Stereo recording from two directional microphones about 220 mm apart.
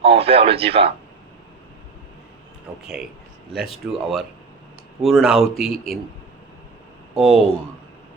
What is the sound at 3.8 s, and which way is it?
Speech, 5° right (ahead or behind).